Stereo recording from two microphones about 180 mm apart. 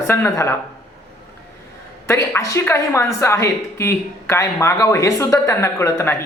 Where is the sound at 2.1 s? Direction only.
15° left (ahead or behind).